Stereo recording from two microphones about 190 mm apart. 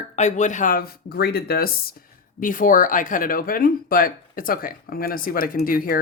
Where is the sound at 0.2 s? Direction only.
35° left (ahead or behind).